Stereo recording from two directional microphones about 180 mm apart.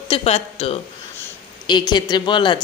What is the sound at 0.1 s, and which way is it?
Speech, 35° left (ahead or behind).